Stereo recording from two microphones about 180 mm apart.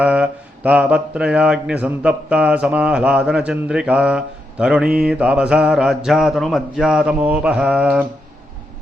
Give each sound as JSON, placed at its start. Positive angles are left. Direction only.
{"t": 0.0, "sound": "mantra", "side_deg": -5}